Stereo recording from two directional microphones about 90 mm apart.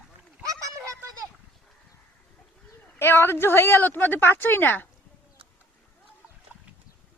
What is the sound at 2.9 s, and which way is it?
A woman's voice, 25° left (ahead or behind).